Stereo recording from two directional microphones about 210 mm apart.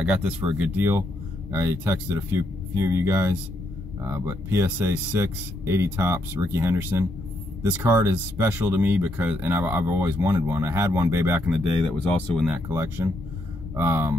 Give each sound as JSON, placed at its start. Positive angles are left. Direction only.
{"t": 0.0, "sound": "speech", "side_deg": -5}